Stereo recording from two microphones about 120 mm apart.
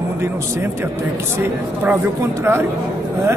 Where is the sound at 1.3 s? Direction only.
15° right (ahead or behind).